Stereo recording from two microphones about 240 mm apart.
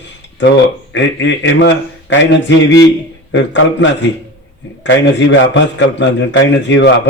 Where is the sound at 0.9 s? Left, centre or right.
Left.